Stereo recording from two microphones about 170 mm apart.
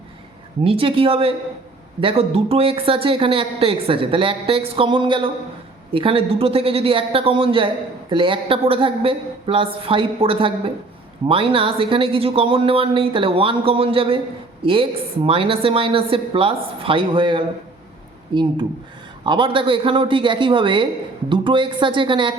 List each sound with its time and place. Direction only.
0.6 s speech: 30° right (ahead or behind)